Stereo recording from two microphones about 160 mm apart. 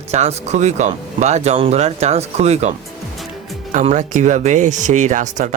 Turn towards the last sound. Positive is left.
turn(degrees=-50)  # may be behind; listen again after turning